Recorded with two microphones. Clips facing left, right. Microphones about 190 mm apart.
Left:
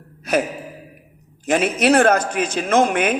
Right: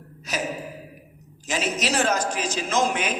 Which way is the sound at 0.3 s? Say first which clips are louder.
Left 10 dB; 55° left (ahead or behind).